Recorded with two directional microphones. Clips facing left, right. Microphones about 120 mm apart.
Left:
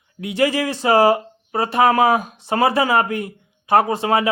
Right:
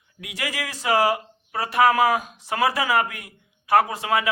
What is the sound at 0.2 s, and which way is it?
A man's voice, 30° left (ahead or behind).